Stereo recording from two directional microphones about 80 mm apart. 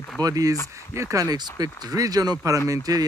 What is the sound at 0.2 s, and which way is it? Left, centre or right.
Speech, right.